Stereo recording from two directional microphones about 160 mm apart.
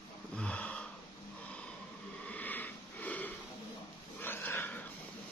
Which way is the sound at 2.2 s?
10° left (ahead or behind).